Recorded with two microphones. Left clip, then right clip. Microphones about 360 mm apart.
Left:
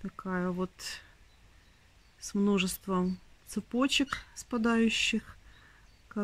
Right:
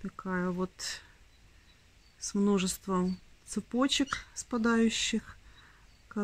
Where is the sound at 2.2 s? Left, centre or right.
Centre.